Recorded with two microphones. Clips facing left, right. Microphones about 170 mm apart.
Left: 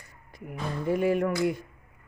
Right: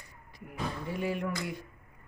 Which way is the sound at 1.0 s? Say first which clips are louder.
Left 7 dB; 55° left (ahead or behind).